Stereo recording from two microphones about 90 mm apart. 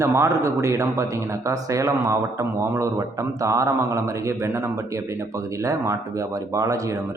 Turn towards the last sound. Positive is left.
turn(degrees=-40)  # may be behind; listen again after turning